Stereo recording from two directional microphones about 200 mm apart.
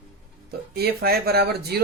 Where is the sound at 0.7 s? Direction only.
50° right (ahead or behind).